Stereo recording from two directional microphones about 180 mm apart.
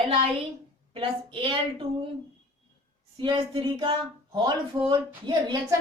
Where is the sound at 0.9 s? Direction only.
30° right (ahead or behind).